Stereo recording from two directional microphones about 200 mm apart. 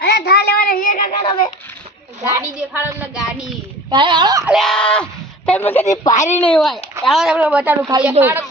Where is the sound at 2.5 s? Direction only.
10° right (ahead or behind).